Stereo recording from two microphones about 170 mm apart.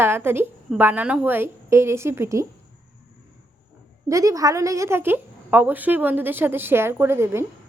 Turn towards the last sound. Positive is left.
turn(degrees=-15)  # may be behind; listen again after turning